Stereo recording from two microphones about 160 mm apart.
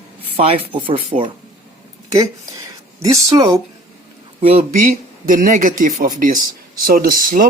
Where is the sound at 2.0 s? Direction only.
25° right (ahead or behind).